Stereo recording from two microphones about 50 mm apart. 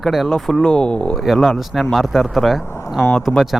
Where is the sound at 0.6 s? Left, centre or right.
Centre.